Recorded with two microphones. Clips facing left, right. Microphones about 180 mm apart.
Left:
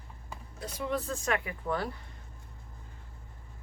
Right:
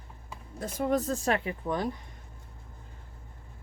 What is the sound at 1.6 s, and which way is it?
Speech, 15° right (ahead or behind).